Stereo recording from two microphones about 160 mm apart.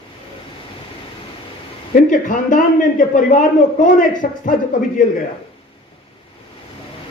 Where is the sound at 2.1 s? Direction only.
55° left (ahead or behind).